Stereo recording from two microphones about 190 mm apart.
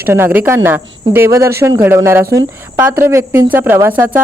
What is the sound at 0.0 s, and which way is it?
A woman's voice, 10° right (ahead or behind).